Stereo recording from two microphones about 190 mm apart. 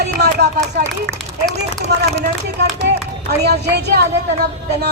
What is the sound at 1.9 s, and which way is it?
Speech, 60° right (ahead or behind).